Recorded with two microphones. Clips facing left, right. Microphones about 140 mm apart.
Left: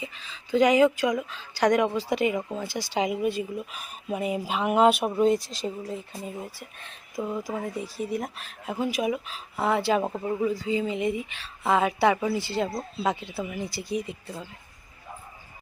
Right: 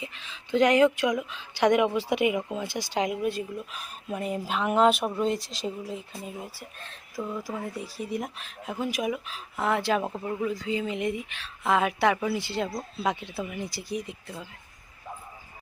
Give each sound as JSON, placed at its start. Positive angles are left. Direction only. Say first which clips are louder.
{"t": 0.0, "sound": "speech", "louder": "left 1 dB", "side_deg": 0}
{"t": 2.6, "sound": "speech", "louder": "left 1 dB", "side_deg": -50}
{"t": 2.9, "sound": "speech", "louder": "left 2 dB", "side_deg": 5}
{"t": 7.2, "sound": "speech", "louder": "left 3 dB", "side_deg": 15}
{"t": 8.1, "sound": "speech", "louder": "left 1 dB", "side_deg": 0}
{"t": 13.7, "sound": "speech", "louder": "left 3 dB", "side_deg": -15}
{"t": 13.9, "sound": "speech", "louder": "left 4 dB", "side_deg": 0}